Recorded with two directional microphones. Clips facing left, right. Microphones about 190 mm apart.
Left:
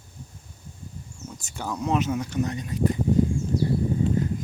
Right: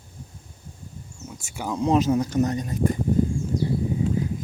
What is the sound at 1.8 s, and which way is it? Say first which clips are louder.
Speech: right 5 dB; 35° right (ahead or behind).